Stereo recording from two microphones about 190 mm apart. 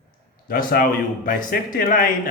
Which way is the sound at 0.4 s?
50° left (ahead or behind).